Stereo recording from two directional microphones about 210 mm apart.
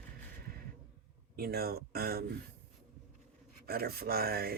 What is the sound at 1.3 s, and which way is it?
Speech, 45° right (ahead or behind).